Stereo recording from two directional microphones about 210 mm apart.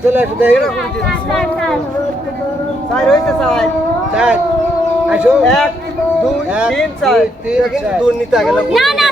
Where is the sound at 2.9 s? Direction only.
Centre (ahead or behind).